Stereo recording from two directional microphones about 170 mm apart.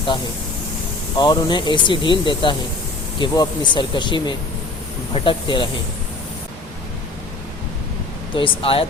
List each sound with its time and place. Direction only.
1.1 s speech: 25° left (ahead or behind)
8.4 s speech: 35° left (ahead or behind)